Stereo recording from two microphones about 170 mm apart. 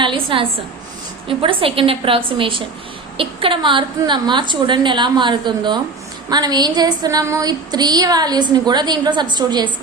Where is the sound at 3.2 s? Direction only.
30° right (ahead or behind).